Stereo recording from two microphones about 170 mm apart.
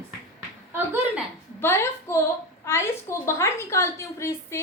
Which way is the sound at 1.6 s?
15° left (ahead or behind).